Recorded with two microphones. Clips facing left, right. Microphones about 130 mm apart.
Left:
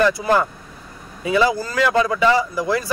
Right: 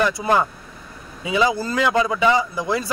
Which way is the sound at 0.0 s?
20° right (ahead or behind).